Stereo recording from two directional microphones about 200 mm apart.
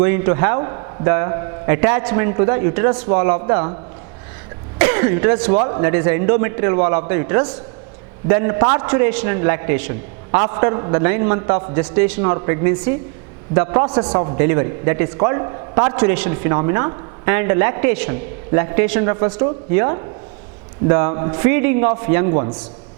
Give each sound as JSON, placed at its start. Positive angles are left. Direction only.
{"t": 0.0, "sound": "a man's voice", "side_deg": -15}
{"t": 4.8, "sound": "a man's voice", "side_deg": -10}